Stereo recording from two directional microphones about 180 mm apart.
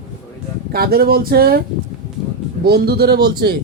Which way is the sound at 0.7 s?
55° right (ahead or behind).